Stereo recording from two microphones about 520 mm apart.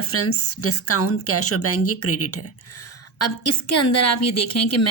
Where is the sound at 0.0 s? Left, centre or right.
Left.